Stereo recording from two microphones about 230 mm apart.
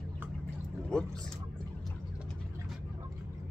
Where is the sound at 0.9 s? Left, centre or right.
Centre.